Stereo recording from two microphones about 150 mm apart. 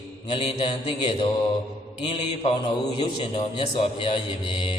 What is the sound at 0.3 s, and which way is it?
A man's voice, 40° left (ahead or behind).